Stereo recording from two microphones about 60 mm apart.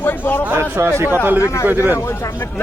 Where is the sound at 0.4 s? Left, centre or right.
Right.